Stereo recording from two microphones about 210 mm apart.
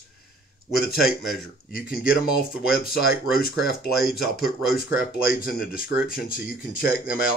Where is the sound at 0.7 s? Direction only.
Centre (ahead or behind).